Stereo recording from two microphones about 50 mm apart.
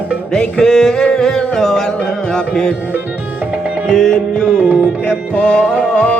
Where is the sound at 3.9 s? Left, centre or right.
Centre.